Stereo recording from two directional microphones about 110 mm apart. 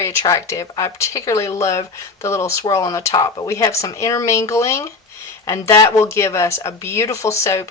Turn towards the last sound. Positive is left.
turn(degrees=25)  # may be behind; listen again after turning